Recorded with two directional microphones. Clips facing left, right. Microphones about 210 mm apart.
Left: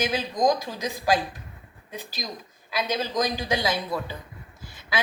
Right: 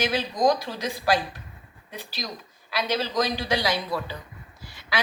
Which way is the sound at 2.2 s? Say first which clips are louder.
Right 1 dB; 20° left (ahead or behind).